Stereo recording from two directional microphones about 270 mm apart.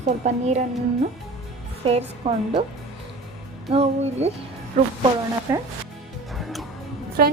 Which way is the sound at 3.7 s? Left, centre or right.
Right.